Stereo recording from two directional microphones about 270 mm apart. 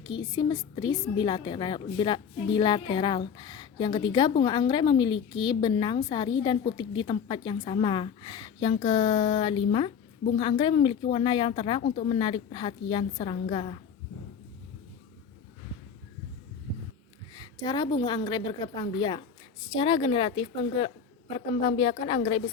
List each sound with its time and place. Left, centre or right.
0.0 s a woman's voice: centre
17.3 s a woman's voice: centre